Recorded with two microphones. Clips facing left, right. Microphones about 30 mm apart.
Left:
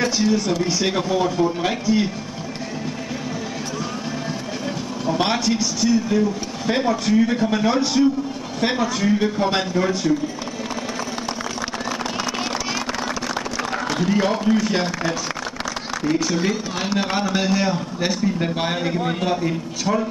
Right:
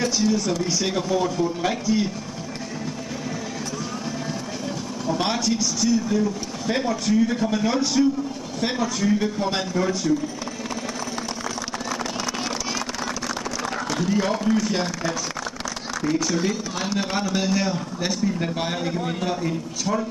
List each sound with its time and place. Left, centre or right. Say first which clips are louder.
0.0 s a man's voice: left 2 dB; centre
5.0 s a man's voice: left 3 dB; centre
13.6 s a man's voice: left 3 dB; left